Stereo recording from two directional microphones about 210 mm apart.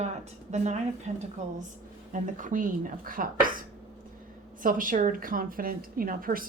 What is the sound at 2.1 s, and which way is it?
A woman's voice, 40° right (ahead or behind).